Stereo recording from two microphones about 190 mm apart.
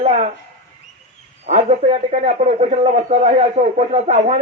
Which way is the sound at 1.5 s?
35° right (ahead or behind).